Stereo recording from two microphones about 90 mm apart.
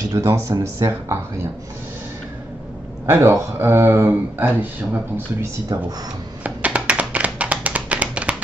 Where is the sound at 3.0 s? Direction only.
25° right (ahead or behind).